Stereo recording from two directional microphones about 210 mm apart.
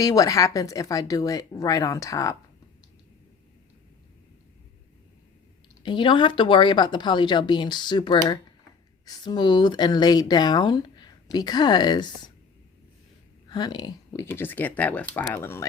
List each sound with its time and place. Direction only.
0.0 s speech: 15° left (ahead or behind)
5.8 s speech: 20° left (ahead or behind)
13.5 s speech: 20° left (ahead or behind)